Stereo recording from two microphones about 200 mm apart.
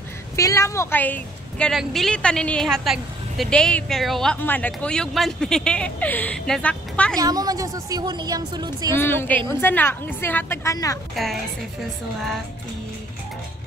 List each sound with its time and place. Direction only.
0.4 s a woman's voice: 15° left (ahead or behind)
7.2 s a woman's voice: 20° right (ahead or behind)
8.9 s a woman's voice: 10° left (ahead or behind)
11.2 s a woman's voice: centre (ahead or behind)